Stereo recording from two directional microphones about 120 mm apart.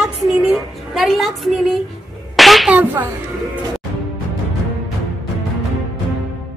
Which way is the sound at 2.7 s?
15° right (ahead or behind).